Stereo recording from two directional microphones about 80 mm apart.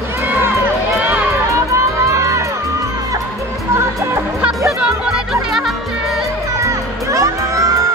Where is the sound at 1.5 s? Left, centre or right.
Right.